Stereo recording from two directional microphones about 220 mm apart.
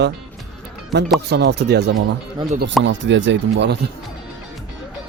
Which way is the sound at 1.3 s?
50° right (ahead or behind).